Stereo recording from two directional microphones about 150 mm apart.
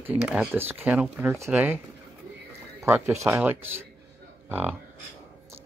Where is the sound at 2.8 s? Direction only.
20° right (ahead or behind).